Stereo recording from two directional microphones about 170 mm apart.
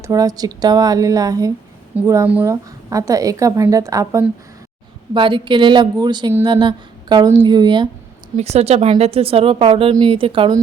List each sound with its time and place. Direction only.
0.0 s a woman's voice: 20° right (ahead or behind)
5.1 s a woman's voice: 30° right (ahead or behind)
8.4 s speech: 40° right (ahead or behind)